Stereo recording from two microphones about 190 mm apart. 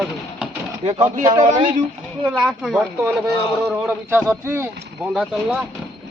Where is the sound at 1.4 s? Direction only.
40° right (ahead or behind).